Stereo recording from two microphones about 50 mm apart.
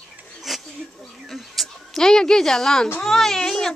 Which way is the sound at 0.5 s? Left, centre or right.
Centre.